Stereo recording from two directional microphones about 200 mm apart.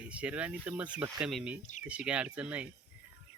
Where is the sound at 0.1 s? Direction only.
5° right (ahead or behind).